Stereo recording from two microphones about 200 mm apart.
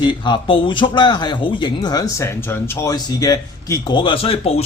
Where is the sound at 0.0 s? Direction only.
25° left (ahead or behind).